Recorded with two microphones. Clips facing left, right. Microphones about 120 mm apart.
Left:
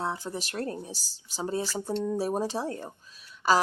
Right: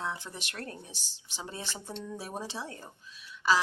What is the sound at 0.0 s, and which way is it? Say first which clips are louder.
Speech: left 5 dB; 35° left (ahead or behind).